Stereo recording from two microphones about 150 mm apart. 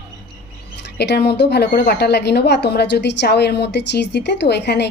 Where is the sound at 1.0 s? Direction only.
90° left.